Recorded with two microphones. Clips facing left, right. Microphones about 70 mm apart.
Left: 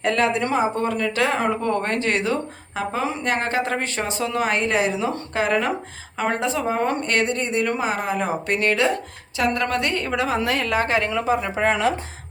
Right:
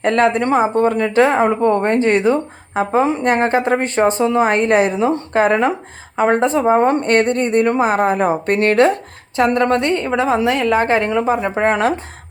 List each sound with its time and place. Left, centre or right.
0.0 s speech: right
4.2 s a woman's voice: right
4.4 s speech: right
9.3 s a woman's voice: right
10.8 s speech: right